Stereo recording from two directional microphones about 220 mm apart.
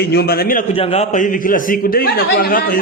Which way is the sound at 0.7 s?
25° left (ahead or behind).